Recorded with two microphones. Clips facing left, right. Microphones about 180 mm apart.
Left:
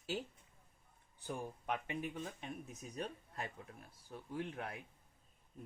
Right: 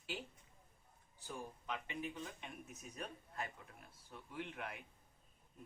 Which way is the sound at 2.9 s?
30° left (ahead or behind).